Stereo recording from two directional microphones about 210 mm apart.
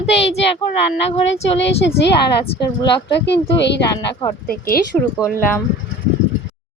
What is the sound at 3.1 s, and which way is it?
Speech, 55° left (ahead or behind).